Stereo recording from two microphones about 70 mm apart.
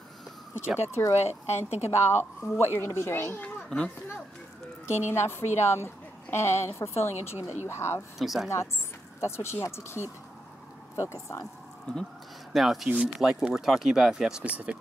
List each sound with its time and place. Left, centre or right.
0.9 s speech: left
3.4 s children playing: centre
4.8 s a woman's voice: left
8.2 s speech: centre
9.2 s speech: left
12.5 s speech: centre
14.4 s speech: centre